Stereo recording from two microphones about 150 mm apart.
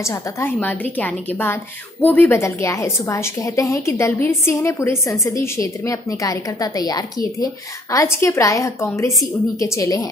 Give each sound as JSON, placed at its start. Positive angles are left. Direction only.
{"t": 0.0, "sound": "a woman's voice", "side_deg": 15}